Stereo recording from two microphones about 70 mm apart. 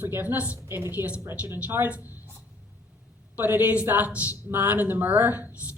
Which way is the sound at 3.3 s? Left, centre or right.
Right.